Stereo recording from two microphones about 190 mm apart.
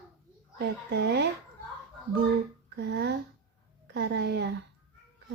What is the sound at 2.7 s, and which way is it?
A woman's voice, 60° right (ahead or behind).